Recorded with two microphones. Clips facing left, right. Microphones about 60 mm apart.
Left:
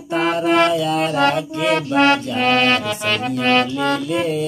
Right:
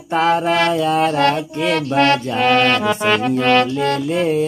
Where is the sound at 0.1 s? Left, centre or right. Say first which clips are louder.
Right 1 dB; right.